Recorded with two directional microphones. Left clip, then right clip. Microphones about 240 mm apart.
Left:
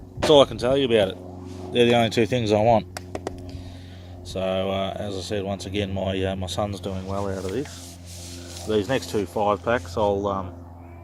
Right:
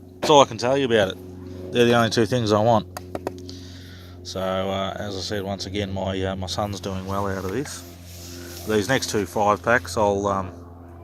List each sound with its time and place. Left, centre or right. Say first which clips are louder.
0.3 s speech: right 1 dB; centre
3.1 s music: right 2 dB; centre
4.3 s speech: even; centre
6.8 s speech: right 2 dB; right